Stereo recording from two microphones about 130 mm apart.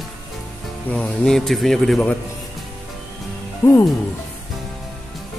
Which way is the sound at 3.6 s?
15° left (ahead or behind).